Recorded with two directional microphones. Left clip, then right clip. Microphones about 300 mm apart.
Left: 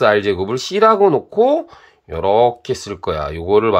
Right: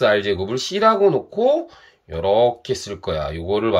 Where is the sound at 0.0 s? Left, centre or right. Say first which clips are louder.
Left 3 dB; centre.